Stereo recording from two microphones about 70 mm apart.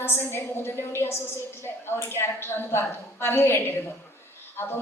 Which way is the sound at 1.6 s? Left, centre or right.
Left.